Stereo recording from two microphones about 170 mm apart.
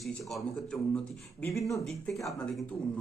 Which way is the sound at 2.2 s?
5° left (ahead or behind).